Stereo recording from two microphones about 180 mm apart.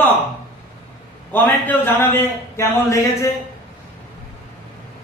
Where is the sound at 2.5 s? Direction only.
15° left (ahead or behind).